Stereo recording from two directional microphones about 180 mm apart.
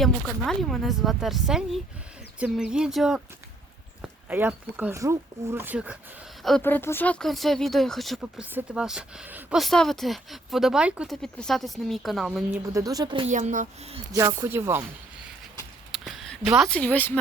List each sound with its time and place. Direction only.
0.0 s speech: centre (ahead or behind)
6.6 s speech: 10° left (ahead or behind)
12.6 s speech: 20° right (ahead or behind)
13.2 s speech: 40° right (ahead or behind)
14.1 s speech: 20° right (ahead or behind)
15.9 s a sound: centre (ahead or behind)
16.6 s speech: 5° left (ahead or behind)